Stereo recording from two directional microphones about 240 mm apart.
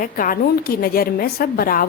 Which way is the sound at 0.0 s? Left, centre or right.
Left.